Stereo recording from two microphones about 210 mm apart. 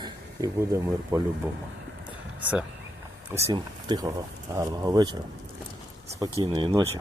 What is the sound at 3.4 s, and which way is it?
Speech, 20° right (ahead or behind).